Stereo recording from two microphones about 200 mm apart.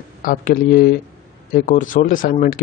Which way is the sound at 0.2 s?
45° left (ahead or behind).